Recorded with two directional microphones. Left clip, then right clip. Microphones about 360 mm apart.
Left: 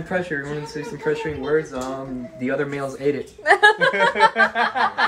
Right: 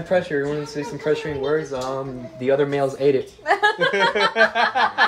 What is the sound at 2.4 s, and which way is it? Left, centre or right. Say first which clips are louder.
Speech: right 5 dB; right.